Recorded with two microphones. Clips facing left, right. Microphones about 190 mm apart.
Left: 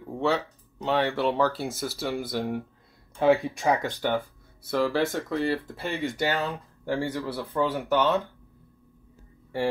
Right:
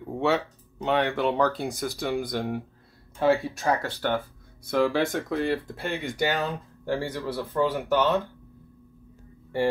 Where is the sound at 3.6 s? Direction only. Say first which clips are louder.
Left 1 dB; 15° left (ahead or behind).